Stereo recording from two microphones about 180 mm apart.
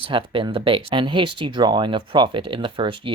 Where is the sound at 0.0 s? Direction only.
30° right (ahead or behind).